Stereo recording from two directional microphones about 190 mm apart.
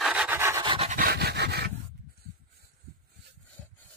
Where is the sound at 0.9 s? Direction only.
55° right (ahead or behind).